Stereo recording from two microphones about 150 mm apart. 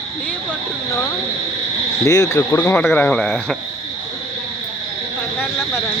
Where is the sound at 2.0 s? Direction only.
20° left (ahead or behind).